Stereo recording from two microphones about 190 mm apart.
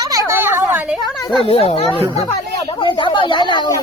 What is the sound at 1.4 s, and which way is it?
A woman's voice, 30° left (ahead or behind).